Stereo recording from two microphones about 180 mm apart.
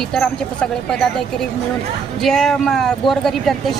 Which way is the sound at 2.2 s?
Centre (ahead or behind).